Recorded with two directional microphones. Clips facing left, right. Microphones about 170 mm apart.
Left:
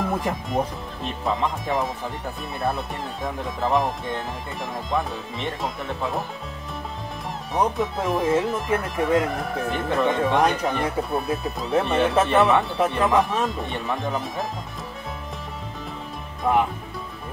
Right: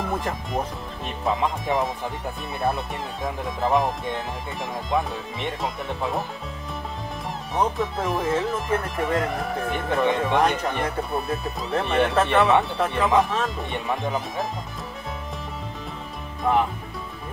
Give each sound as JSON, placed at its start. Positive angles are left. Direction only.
{"t": 0.2, "sound": "speech", "side_deg": 0}
{"t": 7.5, "sound": "speech", "side_deg": 0}
{"t": 16.5, "sound": "speech", "side_deg": 0}